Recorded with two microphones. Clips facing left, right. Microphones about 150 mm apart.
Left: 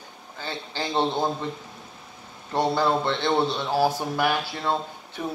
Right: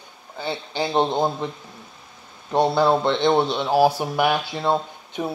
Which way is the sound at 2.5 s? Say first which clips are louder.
Right 4 dB; 15° right (ahead or behind).